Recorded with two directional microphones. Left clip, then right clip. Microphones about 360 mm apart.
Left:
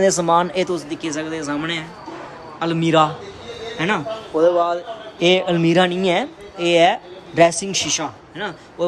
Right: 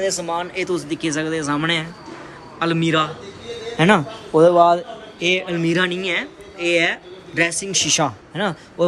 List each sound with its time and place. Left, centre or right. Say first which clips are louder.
0.0 s speech: left 7 dB; centre